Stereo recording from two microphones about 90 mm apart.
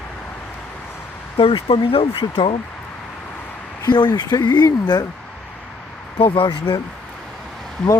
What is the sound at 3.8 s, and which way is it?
Speech, 55° left (ahead or behind).